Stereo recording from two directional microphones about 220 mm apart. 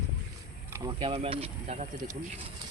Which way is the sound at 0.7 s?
20° right (ahead or behind).